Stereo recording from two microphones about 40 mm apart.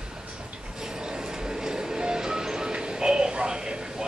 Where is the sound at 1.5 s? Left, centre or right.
Centre.